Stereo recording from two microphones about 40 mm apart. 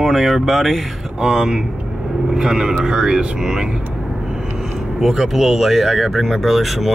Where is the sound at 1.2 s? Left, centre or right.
Centre.